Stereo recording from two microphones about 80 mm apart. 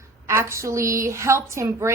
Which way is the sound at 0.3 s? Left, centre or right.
Right.